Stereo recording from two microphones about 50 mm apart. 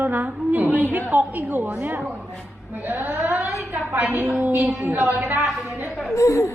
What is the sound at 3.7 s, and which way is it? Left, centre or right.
Speech, right.